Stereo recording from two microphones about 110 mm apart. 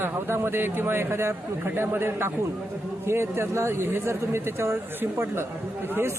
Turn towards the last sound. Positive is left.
turn(degrees=-20)  # may be behind; listen again after turning